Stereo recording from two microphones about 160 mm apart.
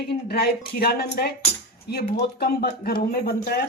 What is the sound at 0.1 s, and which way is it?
A man's voice, 80° left.